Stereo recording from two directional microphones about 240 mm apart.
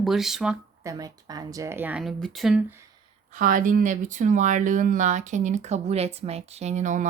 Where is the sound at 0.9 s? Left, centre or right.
Centre.